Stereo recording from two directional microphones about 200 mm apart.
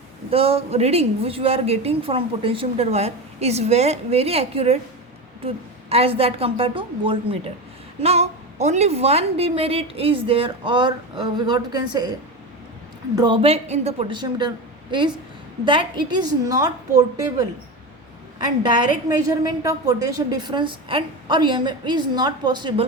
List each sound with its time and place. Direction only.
0.3 s a woman's voice: 30° right (ahead or behind)
13.1 s a woman's voice: 25° right (ahead or behind)